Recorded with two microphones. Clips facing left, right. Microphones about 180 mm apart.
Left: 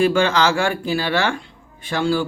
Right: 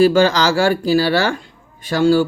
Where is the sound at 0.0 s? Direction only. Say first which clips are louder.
Right 4 dB; 35° right (ahead or behind).